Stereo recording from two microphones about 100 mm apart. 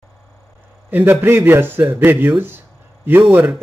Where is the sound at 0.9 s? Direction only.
20° right (ahead or behind).